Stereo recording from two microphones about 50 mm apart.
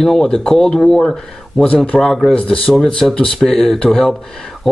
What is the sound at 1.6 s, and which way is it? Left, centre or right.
Speech, left.